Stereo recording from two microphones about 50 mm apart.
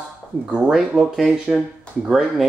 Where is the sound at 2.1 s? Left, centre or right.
Centre.